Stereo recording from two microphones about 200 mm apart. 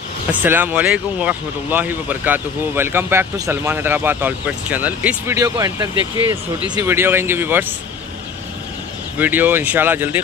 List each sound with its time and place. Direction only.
0.3 s speech: 10° right (ahead or behind)
5.9 s speech: 25° left (ahead or behind)
6.7 s speech: 15° right (ahead or behind)
9.2 s speech: 10° right (ahead or behind)